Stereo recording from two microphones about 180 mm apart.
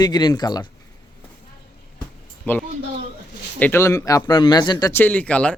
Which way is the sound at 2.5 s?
10° left (ahead or behind).